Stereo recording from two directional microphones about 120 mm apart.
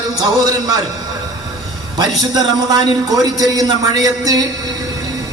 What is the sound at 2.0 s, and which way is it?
A man's voice, 30° right (ahead or behind).